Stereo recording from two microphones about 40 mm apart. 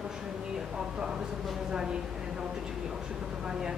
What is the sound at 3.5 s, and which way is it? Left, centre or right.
Speech, centre.